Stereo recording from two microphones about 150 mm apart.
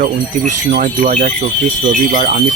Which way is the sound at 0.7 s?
65° right (ahead or behind).